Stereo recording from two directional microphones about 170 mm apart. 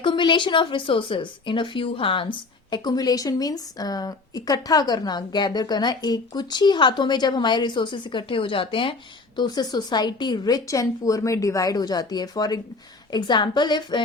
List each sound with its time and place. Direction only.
0.0 s speech: 30° left (ahead or behind)